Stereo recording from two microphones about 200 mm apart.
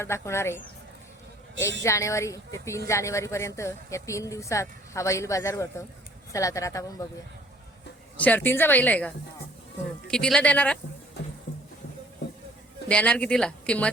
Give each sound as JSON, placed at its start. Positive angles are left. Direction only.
{"t": 0.0, "sound": "speech", "side_deg": 15}
{"t": 1.8, "sound": "speech", "side_deg": 15}
{"t": 8.2, "sound": "speech", "side_deg": 10}
{"t": 12.9, "sound": "speech", "side_deg": 5}